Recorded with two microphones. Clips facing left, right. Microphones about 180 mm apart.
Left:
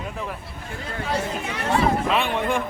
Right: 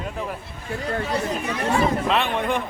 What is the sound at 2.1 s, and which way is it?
Speech, 10° left (ahead or behind).